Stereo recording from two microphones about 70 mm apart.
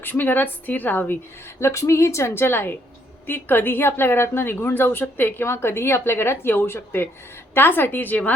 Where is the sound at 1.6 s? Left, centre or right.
Left.